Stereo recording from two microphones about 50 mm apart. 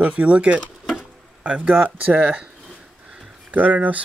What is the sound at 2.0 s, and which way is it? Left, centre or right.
Speech, right.